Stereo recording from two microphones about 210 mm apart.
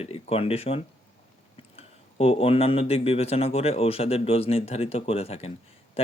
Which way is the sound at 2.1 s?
25° left (ahead or behind).